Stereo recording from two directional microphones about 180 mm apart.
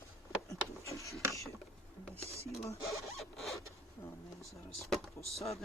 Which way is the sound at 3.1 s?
Centre (ahead or behind).